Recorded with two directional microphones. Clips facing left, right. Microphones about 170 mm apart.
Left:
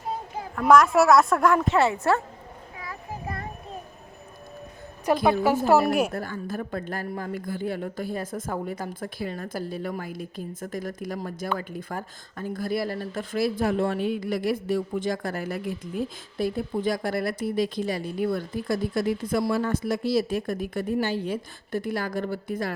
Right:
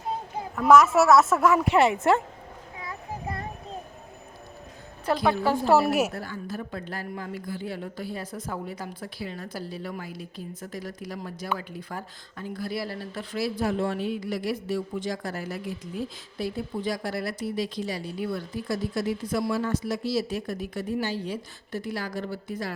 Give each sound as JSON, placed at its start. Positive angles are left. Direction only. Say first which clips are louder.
{"t": 0.5, "sound": "speech", "louder": "even", "side_deg": -5}
{"t": 5.2, "sound": "a woman's voice", "louder": "left 2 dB", "side_deg": 15}
{"t": 5.6, "sound": "speech", "louder": "even", "side_deg": 0}
{"t": 6.1, "sound": "speech", "louder": "left 3 dB", "side_deg": 50}